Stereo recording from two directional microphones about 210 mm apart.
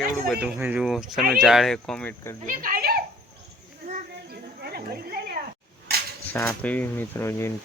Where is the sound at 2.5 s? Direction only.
40° right (ahead or behind).